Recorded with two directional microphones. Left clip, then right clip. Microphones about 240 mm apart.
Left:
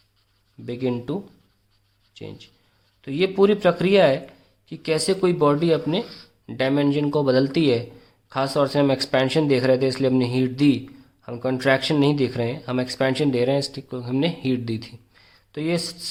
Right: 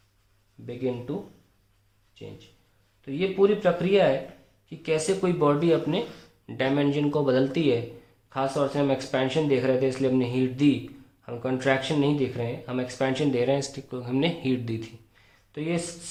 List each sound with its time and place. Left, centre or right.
0.6 s speech: left
2.2 s a man's voice: left